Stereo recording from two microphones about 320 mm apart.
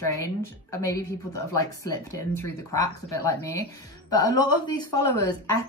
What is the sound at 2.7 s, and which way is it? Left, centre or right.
Speech, centre.